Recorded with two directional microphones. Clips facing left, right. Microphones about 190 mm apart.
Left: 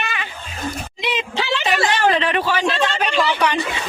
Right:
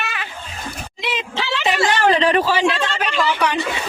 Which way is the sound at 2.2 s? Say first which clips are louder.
Right 4 dB; 35° right (ahead or behind).